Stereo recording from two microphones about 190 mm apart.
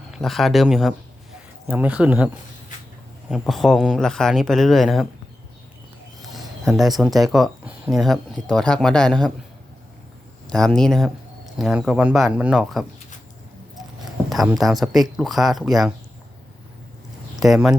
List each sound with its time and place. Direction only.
0.1 s speech: centre (ahead or behind)
6.2 s speech: centre (ahead or behind)
10.4 s speech: 5° left (ahead or behind)
14.3 s speech: centre (ahead or behind)
17.4 s speech: centre (ahead or behind)